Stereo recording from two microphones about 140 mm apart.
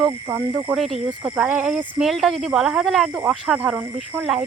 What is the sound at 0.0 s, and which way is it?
Speech, 20° right (ahead or behind).